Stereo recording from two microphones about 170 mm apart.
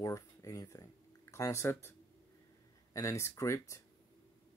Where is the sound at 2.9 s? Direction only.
15° left (ahead or behind).